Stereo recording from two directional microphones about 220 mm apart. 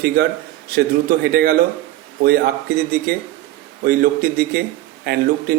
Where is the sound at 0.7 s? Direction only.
45° right (ahead or behind).